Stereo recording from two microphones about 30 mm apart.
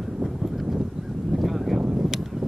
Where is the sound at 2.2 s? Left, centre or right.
Centre.